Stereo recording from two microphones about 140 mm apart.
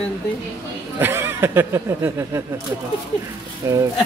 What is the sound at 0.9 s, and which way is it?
Speech, 15° right (ahead or behind).